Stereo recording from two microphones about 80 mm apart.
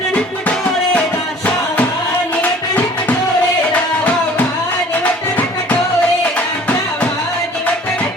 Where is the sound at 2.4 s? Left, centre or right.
Centre.